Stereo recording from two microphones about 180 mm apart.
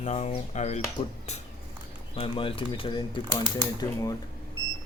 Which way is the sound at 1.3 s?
40° left (ahead or behind).